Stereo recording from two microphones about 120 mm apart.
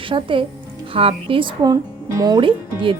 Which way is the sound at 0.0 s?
45° right (ahead or behind).